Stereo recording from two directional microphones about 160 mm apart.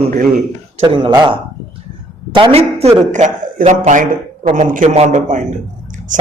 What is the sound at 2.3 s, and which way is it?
Speech, 35° right (ahead or behind).